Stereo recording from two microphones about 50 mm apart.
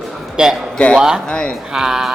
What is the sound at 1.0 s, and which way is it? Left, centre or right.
Speech, centre.